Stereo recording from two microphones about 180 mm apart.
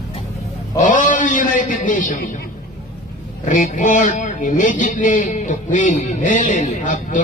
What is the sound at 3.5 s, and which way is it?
Speech, 45° left (ahead or behind).